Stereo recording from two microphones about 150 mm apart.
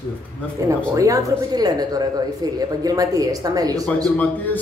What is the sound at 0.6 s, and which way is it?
Speech, 20° right (ahead or behind).